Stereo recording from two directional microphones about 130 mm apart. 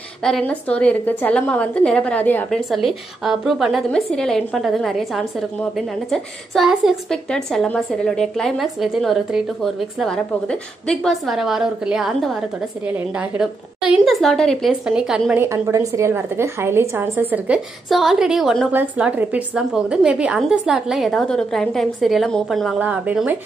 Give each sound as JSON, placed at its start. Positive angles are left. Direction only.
{"t": 0.2, "sound": "a woman's voice", "side_deg": 5}
{"t": 2.5, "sound": "a woman's voice", "side_deg": 0}
{"t": 14.7, "sound": "a woman's voice", "side_deg": -5}
{"t": 15.3, "sound": "a woman's voice", "side_deg": -20}
{"t": 17.8, "sound": "a woman's voice", "side_deg": 0}
{"t": 18.7, "sound": "a woman's voice", "side_deg": -10}
{"t": 22.8, "sound": "speech", "side_deg": -10}